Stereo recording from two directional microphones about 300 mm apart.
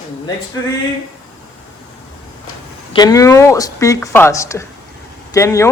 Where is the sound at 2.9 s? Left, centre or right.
Centre.